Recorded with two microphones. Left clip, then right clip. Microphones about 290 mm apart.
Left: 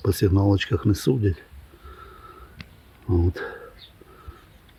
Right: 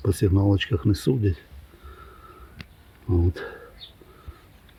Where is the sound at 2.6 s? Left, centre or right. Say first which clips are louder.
Right 1 dB; centre.